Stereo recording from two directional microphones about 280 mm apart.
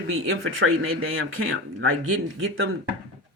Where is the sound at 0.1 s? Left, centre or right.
Right.